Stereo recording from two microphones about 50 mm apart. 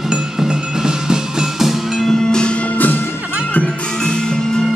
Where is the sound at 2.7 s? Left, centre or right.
Left.